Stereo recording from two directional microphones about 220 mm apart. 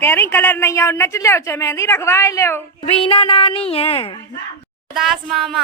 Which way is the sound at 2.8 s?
25° left (ahead or behind).